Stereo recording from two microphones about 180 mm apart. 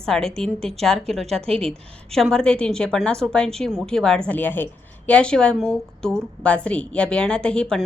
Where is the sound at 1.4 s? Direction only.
30° right (ahead or behind).